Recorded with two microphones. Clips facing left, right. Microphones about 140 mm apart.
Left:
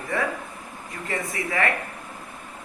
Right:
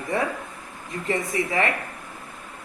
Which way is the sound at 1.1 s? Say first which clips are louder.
Right 4 dB; 20° right (ahead or behind).